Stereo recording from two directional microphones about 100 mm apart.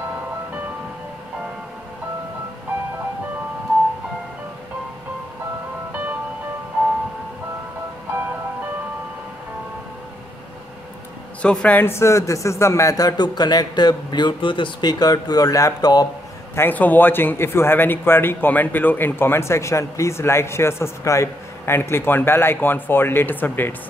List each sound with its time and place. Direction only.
11.4 s speech: 10° left (ahead or behind)
11.8 s a man's voice: 25° left (ahead or behind)
16.5 s a man's voice: 20° left (ahead or behind)